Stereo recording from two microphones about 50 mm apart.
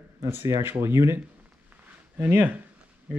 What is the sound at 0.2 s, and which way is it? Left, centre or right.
Speech, right.